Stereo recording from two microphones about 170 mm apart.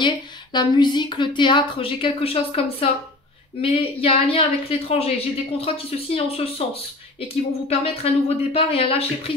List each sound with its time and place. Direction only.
0.0 s a woman's voice: 25° left (ahead or behind)